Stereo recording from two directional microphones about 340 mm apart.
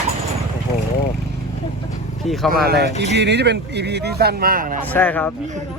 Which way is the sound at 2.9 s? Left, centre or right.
Centre.